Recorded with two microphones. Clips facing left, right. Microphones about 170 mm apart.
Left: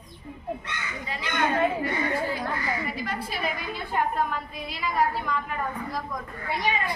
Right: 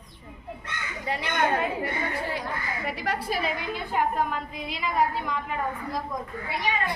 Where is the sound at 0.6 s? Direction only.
60° right (ahead or behind).